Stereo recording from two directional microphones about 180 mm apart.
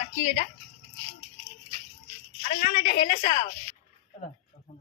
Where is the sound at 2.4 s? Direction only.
45° left (ahead or behind).